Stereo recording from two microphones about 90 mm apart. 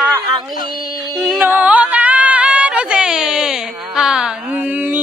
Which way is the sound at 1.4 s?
20° right (ahead or behind).